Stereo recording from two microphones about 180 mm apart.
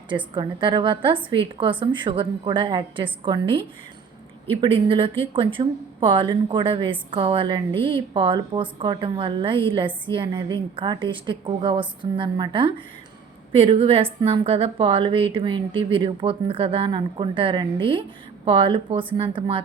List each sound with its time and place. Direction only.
0.3 s a woman's voice: 25° right (ahead or behind)
4.6 s a woman's voice: 30° right (ahead or behind)